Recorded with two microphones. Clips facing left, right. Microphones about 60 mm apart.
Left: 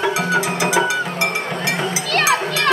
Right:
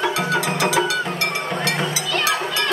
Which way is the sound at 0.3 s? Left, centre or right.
Centre.